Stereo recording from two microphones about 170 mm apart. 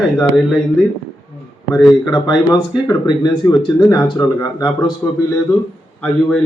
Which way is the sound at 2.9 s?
25° left (ahead or behind).